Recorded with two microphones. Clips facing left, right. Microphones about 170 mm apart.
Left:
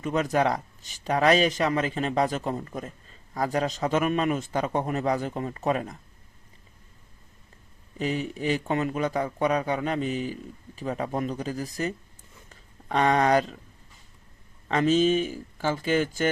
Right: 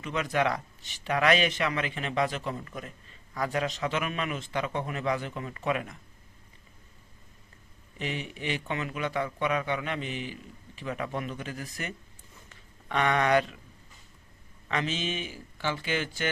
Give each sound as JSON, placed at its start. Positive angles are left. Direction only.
{"t": 0.0, "sound": "speech", "side_deg": 45}
{"t": 7.9, "sound": "speech", "side_deg": 40}
{"t": 14.7, "sound": "speech", "side_deg": 40}